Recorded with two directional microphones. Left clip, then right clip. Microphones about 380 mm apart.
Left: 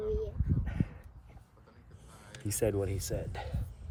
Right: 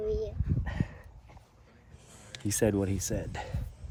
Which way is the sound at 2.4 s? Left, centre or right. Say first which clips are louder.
Right 3 dB; right.